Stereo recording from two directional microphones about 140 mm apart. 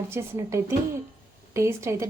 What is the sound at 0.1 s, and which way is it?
A woman's voice, 20° right (ahead or behind).